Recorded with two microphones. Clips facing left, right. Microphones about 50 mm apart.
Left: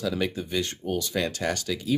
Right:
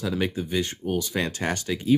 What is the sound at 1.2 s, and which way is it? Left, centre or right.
Speech, right.